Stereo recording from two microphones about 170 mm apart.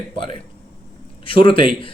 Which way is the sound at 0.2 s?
30° left (ahead or behind).